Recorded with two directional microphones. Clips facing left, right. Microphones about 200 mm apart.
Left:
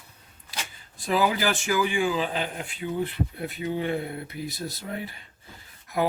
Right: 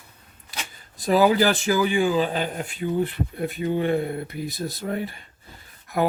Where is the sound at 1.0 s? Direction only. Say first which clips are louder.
Right 6 dB; 40° right (ahead or behind).